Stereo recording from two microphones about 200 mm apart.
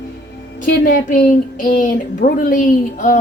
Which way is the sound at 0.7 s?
45° left (ahead or behind).